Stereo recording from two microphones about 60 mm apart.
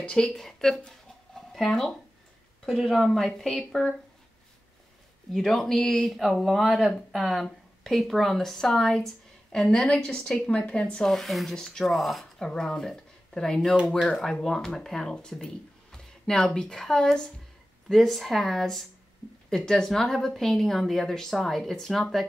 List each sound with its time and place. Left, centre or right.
0.0 s speech: centre
5.3 s speech: centre
10.4 s a woman's voice: left
11.1 s speech: centre
12.4 s speech: centre